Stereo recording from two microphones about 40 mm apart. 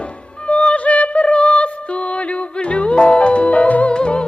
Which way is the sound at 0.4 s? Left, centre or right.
Left.